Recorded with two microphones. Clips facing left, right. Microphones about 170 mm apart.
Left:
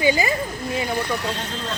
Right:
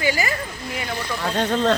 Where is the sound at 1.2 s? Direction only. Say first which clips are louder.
Right 7 dB; 75° right (ahead or behind).